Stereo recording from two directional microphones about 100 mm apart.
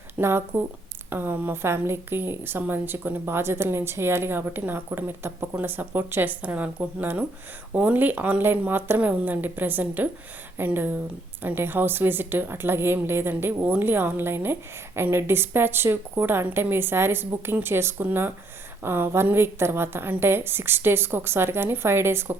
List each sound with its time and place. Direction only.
0.2 s a woman's voice: 25° right (ahead or behind)